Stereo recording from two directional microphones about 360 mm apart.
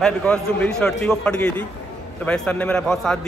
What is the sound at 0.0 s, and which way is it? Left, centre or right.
A man's voice, centre.